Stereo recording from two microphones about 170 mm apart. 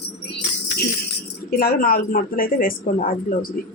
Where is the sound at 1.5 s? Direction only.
60° left (ahead or behind).